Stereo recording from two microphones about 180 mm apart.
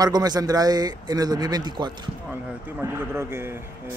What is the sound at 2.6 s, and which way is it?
A man's voice, 10° right (ahead or behind).